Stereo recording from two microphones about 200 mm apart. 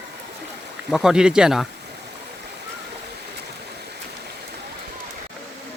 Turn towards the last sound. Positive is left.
turn(degrees=-55)  # may be behind; listen again after turning